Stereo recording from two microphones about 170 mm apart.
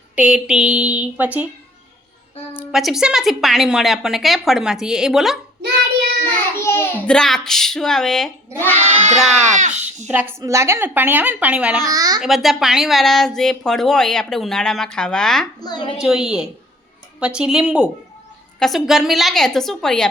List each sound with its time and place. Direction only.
0.2 s a woman's voice: 5° right (ahead or behind)
2.5 s speech: 5° right (ahead or behind)
6.2 s a sound: 15° left (ahead or behind)
7.1 s speech: 5° left (ahead or behind)
9.6 s a child's voice: 45° right (ahead or behind)
10.1 s a woman's voice: 10° right (ahead or behind)
11.9 s a child's voice: 20° right (ahead or behind)
12.2 s speech: centre (ahead or behind)
15.6 s a woman's voice: 25° left (ahead or behind)
16.0 s speech: 5° right (ahead or behind)